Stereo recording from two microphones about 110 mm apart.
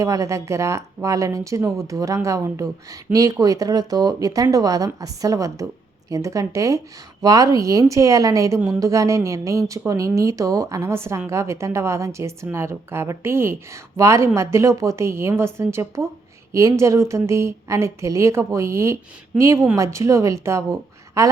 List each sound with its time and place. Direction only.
0.0 s a woman's voice: 30° right (ahead or behind)